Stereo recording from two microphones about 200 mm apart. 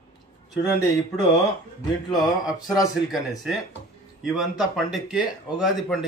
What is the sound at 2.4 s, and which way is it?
Speech, 20° left (ahead or behind).